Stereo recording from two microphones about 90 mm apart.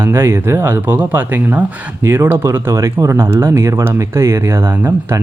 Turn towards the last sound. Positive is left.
turn(degrees=-25)  # may be behind; listen again after turning